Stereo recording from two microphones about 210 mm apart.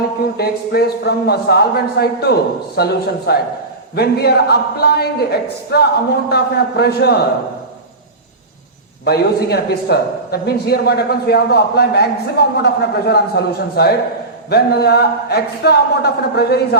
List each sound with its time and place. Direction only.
0.3 s speech: 50° left (ahead or behind)
9.0 s speech: 50° left (ahead or behind)